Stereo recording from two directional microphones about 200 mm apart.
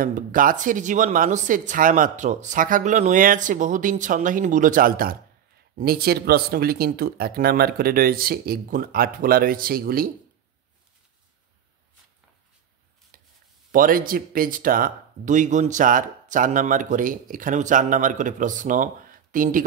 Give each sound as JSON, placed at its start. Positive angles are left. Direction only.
{"t": 0.0, "sound": "speech", "side_deg": -45}
{"t": 13.1, "sound": "chopping", "side_deg": -45}
{"t": 13.7, "sound": "speech", "side_deg": -45}